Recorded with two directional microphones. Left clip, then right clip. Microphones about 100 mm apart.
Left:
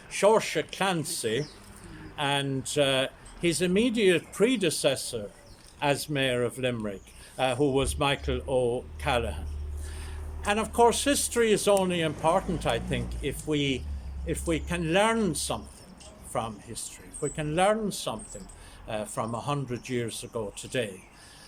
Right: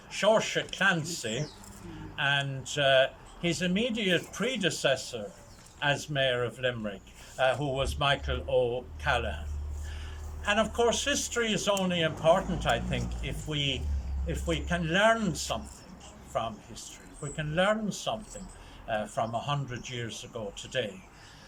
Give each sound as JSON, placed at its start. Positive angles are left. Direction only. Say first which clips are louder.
{"t": 0.1, "sound": "speech", "louder": "left 2 dB", "side_deg": 40}
{"t": 10.4, "sound": "speech", "louder": "left 3 dB", "side_deg": 40}